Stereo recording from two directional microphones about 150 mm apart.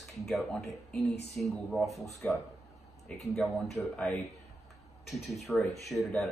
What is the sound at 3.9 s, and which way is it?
Speech, 10° left (ahead or behind).